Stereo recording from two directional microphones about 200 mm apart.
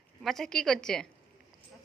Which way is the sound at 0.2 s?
Centre (ahead or behind).